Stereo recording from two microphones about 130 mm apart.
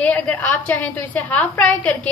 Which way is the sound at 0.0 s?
10° left (ahead or behind).